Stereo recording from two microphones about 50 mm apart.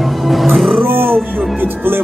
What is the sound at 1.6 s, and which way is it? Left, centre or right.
Speech, right.